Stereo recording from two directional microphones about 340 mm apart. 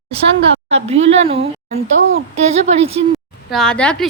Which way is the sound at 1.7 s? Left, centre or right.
Right.